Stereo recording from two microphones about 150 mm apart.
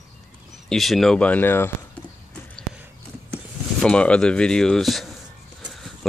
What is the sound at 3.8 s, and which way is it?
Speech, 5° left (ahead or behind).